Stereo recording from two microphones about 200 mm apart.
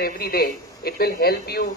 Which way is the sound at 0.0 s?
50° left (ahead or behind).